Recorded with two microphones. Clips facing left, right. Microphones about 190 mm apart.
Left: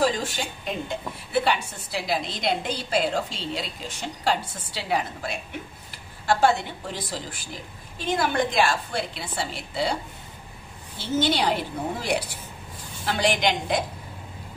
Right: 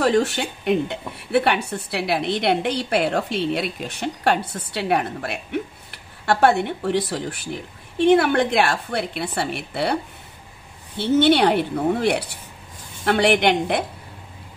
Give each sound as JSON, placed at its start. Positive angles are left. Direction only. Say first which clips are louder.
{"t": 0.0, "sound": "speech", "louder": "right 6 dB", "side_deg": -65}
{"t": 11.0, "sound": "speech", "louder": "right 8 dB", "side_deg": -60}